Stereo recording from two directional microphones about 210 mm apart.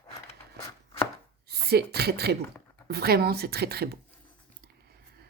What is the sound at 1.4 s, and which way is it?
A woman's voice, 50° right (ahead or behind).